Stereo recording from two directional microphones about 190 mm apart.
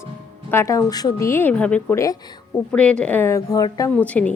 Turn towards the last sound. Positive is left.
turn(degrees=5)  # may be behind; listen again after turning